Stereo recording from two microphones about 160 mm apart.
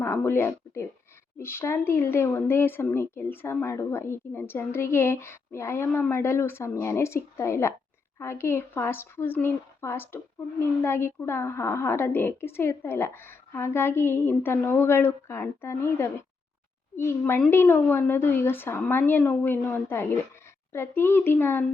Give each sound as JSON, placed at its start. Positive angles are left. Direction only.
{"t": 0.0, "sound": "speech", "side_deg": 15}